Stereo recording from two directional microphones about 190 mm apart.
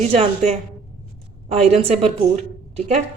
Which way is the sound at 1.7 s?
35° right (ahead or behind).